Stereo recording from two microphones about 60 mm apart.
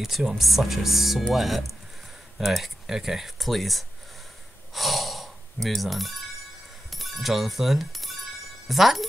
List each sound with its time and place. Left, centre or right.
0.0 s speech: centre